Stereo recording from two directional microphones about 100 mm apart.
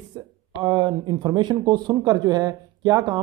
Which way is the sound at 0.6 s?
50° right (ahead or behind).